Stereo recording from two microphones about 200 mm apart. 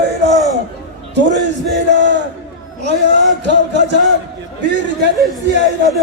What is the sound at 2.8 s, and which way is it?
A man's voice, 60° right (ahead or behind).